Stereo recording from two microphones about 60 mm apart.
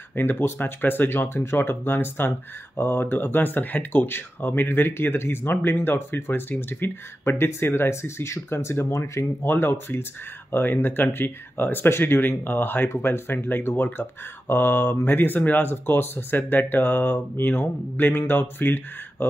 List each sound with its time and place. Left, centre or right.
0.1 s speech: left
9.5 s speech: left